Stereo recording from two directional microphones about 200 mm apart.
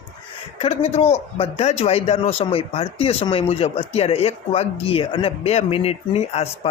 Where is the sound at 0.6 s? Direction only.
30° left (ahead or behind).